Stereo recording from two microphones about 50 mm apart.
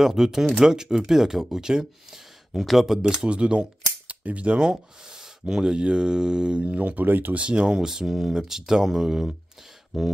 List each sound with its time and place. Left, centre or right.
0.0 s speech: centre
3.0 s speech: centre
4.6 s speech: centre; by 7.3 s right
7.3 s speech: right
9.9 s a sound: centre